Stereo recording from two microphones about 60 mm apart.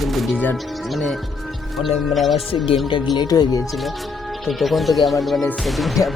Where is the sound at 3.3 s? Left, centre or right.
Left.